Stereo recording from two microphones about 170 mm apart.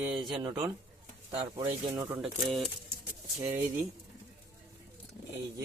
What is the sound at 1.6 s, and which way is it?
Speech, 35° right (ahead or behind).